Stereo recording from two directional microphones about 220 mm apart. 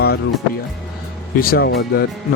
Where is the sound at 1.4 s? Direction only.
45° left (ahead or behind).